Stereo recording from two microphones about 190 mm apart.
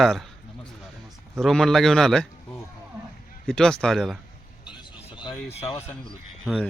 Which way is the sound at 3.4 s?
5° left (ahead or behind).